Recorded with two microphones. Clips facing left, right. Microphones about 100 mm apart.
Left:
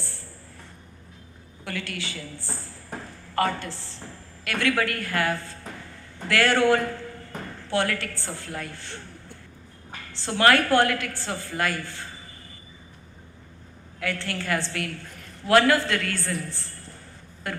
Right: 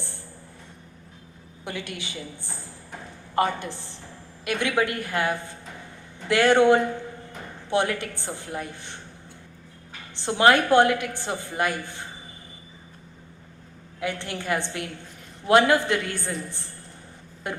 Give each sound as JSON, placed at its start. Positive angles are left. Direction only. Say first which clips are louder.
{"t": 1.6, "sound": "a woman's voice", "louder": "left 1 dB", "side_deg": -20}
{"t": 10.1, "sound": "a woman's voice", "louder": "right 1 dB", "side_deg": -20}
{"t": 14.0, "sound": "a woman's voice", "louder": "even", "side_deg": -20}